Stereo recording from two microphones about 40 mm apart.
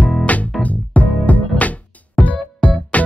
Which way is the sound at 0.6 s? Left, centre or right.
Left.